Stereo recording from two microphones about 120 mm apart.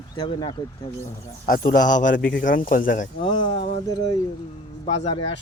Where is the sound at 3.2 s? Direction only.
45° left (ahead or behind).